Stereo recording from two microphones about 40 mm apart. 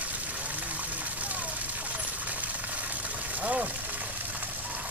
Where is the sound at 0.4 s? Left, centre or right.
Right.